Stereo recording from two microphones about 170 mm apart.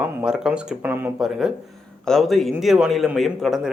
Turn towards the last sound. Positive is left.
turn(degrees=0)  # may be behind; listen again after turning